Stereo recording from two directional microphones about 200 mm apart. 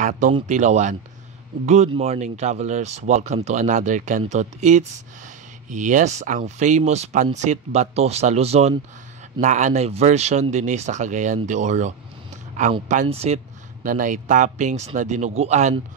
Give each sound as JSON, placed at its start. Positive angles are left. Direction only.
{"t": 0.5, "sound": "speech", "side_deg": -35}